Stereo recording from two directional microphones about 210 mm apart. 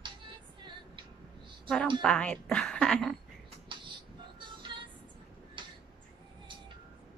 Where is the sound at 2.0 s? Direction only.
5° left (ahead or behind).